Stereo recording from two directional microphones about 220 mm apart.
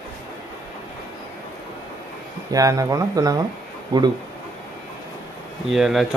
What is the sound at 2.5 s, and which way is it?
A man's voice, 15° right (ahead or behind).